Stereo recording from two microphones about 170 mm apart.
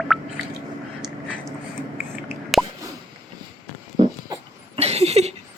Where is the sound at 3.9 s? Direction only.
30° right (ahead or behind).